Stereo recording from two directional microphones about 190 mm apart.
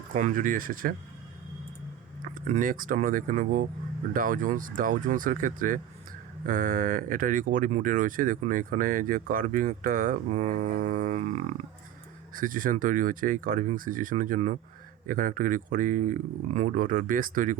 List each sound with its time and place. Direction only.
0.1 s speech: 45° right (ahead or behind)
2.3 s speech: 45° right (ahead or behind)